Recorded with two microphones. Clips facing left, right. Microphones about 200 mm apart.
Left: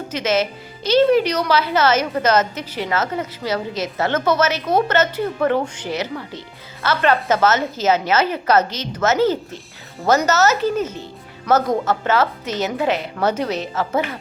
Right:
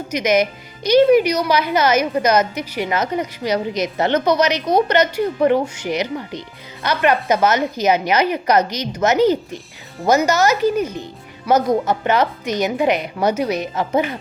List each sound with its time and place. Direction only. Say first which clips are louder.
0.1 s a woman's voice: right 3 dB; 15° right (ahead or behind)